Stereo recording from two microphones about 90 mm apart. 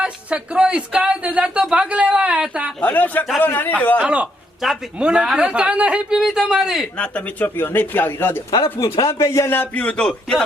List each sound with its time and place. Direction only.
0.0 s speech: 10° right (ahead or behind)
2.8 s a man's voice: 20° left (ahead or behind)
3.9 s speech: 15° right (ahead or behind)
7.0 s a man's voice: 20° left (ahead or behind)
8.5 s speech: 75° left (ahead or behind)
9.0 s a man's voice: 35° left (ahead or behind); by 10.4 s 10° left (ahead or behind)